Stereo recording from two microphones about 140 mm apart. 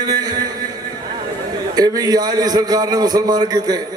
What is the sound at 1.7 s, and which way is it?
A man's voice, 25° right (ahead or behind).